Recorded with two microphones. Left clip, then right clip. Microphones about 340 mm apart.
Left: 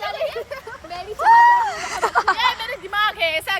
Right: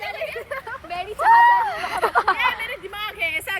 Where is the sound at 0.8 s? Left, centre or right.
Right.